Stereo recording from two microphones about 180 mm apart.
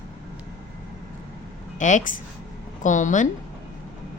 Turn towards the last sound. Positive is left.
turn(degrees=45)  # may be behind; listen again after turning